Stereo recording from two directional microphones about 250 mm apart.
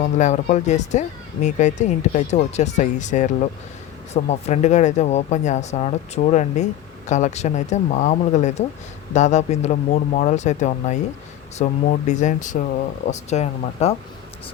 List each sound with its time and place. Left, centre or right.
0.2 s speech: left